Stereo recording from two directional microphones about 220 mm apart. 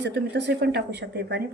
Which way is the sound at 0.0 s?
50° right (ahead or behind).